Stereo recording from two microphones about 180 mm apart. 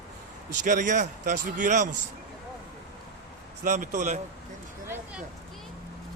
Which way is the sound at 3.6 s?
45° right (ahead or behind).